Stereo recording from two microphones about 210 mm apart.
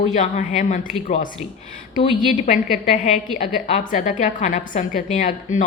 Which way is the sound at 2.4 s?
35° left (ahead or behind).